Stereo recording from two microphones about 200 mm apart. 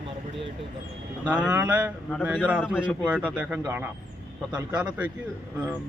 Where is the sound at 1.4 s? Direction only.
5° right (ahead or behind).